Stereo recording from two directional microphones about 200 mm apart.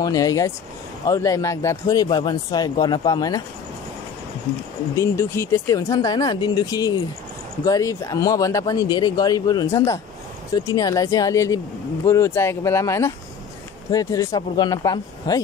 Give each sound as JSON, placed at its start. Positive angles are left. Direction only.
{"t": 0.0, "sound": "speech", "side_deg": 15}
{"t": 4.9, "sound": "speech", "side_deg": 15}